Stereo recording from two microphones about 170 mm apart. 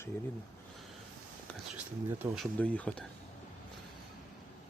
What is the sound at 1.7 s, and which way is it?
Speech, 10° right (ahead or behind).